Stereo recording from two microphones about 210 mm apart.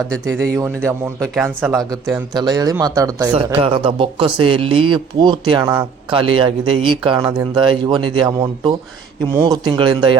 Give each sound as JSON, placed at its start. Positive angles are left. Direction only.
{"t": 0.1, "sound": "speech", "side_deg": 5}
{"t": 1.7, "sound": "speech", "side_deg": -15}